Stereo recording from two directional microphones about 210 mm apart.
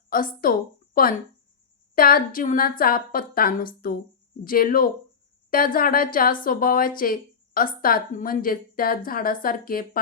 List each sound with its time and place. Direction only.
0.1 s speech: 40° left (ahead or behind)
2.0 s a woman's voice: 45° left (ahead or behind)